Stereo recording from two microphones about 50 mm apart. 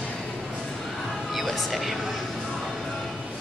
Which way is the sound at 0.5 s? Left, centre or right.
Centre.